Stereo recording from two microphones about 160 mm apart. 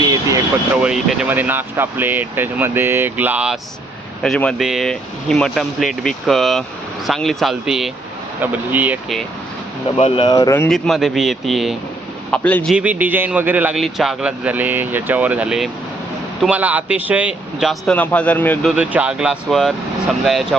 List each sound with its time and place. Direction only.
0.0 s vehicle: 20° right (ahead or behind)
0.8 s speech: 5° right (ahead or behind)
4.2 s speech: 5° left (ahead or behind); by 9.0 s 10° right (ahead or behind)
10.0 s speech: 30° left (ahead or behind)
10.7 s speech: centre (ahead or behind)
12.3 s speech: 10° left (ahead or behind)
12.7 s speech: 10° right (ahead or behind); by 18.7 s 10° left (ahead or behind)
18.8 s speech: 10° right (ahead or behind)